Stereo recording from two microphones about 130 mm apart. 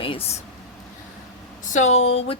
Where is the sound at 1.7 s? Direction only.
60° left (ahead or behind).